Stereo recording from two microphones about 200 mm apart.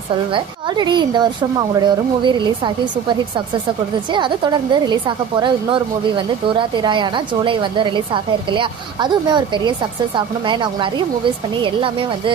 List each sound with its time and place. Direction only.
0.3 s a woman's voice: 20° right (ahead or behind)